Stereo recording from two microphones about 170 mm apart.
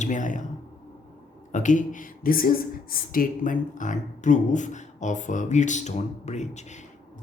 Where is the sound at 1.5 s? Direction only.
50° left (ahead or behind).